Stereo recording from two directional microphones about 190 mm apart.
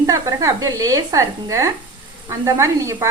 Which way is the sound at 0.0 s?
15° right (ahead or behind).